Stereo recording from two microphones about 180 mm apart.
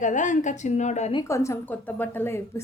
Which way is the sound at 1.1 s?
15° left (ahead or behind).